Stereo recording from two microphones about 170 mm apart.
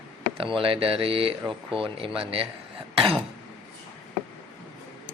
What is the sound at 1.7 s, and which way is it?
Speech, 30° right (ahead or behind).